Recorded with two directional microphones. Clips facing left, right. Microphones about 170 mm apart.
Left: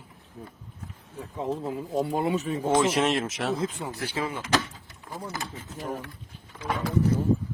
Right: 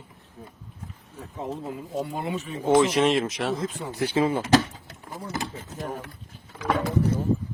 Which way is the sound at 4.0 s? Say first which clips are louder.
Right 10 dB; 25° right (ahead or behind).